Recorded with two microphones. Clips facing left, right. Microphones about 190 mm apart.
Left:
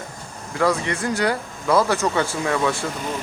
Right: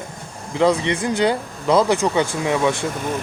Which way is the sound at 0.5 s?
20° right (ahead or behind).